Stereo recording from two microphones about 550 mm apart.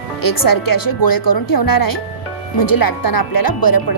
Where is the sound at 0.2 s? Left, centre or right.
Left.